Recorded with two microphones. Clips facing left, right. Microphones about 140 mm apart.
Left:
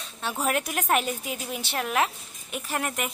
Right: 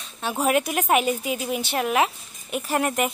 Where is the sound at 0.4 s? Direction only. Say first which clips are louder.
Right 6 dB; 10° right (ahead or behind).